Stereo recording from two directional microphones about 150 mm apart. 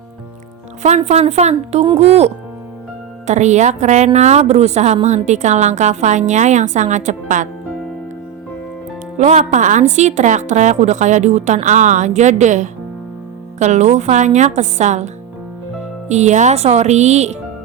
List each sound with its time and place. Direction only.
0.8 s a woman's voice: 50° right (ahead or behind)
9.1 s a woman's voice: 50° right (ahead or behind)